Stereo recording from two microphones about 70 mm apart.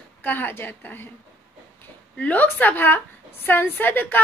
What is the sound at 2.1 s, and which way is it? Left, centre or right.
A woman's voice, left.